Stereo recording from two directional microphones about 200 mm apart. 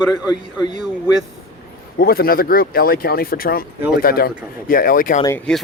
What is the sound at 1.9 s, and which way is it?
Speech, 50° left (ahead or behind).